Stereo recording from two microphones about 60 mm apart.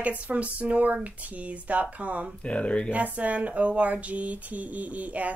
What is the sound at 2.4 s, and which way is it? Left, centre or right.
Speech, centre.